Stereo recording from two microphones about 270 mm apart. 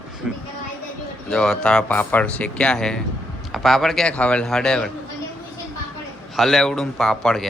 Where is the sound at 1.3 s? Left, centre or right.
Centre.